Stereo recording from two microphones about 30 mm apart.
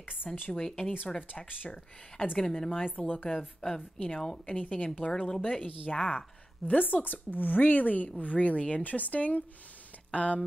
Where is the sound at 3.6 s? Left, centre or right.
Centre.